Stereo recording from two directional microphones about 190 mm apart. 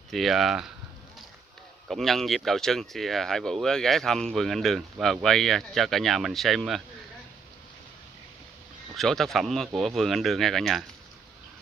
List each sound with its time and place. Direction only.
0.1 s speech: centre (ahead or behind)
1.9 s speech: centre (ahead or behind)
8.9 s speech: centre (ahead or behind)